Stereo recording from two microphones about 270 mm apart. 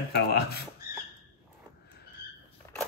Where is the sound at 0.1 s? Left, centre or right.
Left.